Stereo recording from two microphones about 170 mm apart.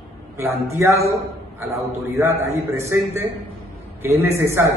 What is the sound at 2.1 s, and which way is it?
A man's voice, 15° right (ahead or behind).